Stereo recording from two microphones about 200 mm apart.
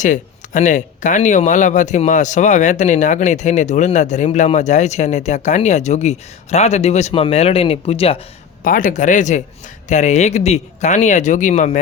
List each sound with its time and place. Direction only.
0.0 s speech: 40° left (ahead or behind)
8.6 s speech: 40° left (ahead or behind)